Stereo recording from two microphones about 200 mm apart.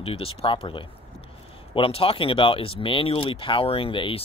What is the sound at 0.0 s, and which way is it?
Speech, 30° left (ahead or behind).